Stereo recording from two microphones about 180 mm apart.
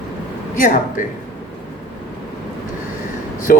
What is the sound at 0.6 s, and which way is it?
Speech, 50° left (ahead or behind).